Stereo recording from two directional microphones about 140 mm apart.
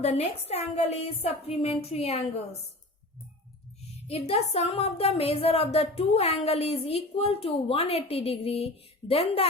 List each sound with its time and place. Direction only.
0.0 s a woman's voice: 50° left (ahead or behind)
4.1 s a woman's voice: 50° left (ahead or behind)